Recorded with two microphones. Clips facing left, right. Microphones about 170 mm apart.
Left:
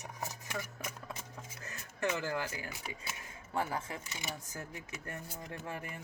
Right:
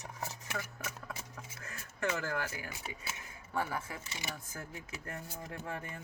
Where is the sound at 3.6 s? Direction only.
20° left (ahead or behind).